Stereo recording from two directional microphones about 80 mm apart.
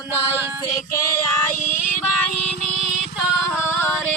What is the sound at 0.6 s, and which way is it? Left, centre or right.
Music, left.